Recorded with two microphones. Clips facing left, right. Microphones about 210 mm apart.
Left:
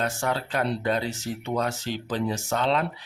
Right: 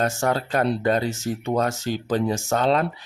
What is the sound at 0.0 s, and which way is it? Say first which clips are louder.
Speech: right 5 dB; 45° right (ahead or behind).